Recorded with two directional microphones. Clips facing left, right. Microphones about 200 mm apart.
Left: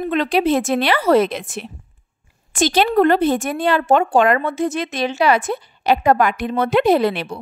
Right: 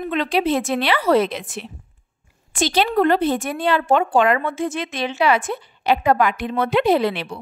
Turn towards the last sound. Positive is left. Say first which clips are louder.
# left 2 dB
turn(degrees=45)  # may be behind; listen again after turning